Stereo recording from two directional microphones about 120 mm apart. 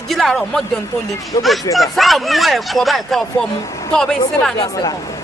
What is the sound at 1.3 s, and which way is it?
Speech, 25° left (ahead or behind).